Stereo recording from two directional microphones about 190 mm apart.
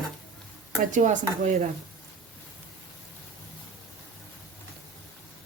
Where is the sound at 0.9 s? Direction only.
40° right (ahead or behind).